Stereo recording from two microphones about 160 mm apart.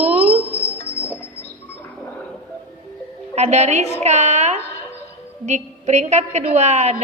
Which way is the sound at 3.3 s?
45° right (ahead or behind).